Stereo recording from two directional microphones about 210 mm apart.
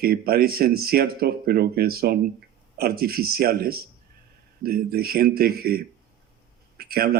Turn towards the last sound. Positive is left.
turn(degrees=-45)  # may be behind; listen again after turning